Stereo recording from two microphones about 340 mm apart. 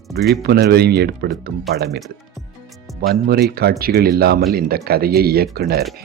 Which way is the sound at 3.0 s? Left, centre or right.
Right.